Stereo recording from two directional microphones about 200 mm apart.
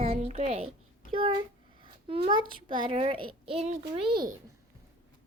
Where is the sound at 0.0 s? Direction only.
30° right (ahead or behind).